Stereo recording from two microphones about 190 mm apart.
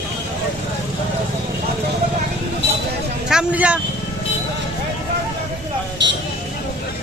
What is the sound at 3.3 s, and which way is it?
Vehicle, 5° right (ahead or behind).